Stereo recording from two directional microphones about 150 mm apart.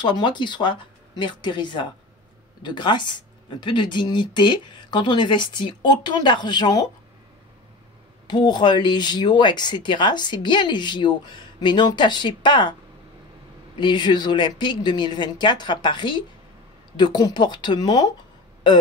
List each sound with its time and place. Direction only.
0.0 s speech: 30° left (ahead or behind)
8.3 s speech: 30° left (ahead or behind)
13.7 s speech: 30° left (ahead or behind)